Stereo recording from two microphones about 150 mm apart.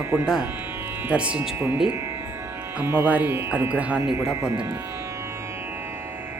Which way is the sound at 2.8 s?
15° right (ahead or behind).